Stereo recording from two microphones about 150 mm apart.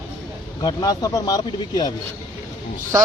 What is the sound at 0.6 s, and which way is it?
Speech, 25° left (ahead or behind).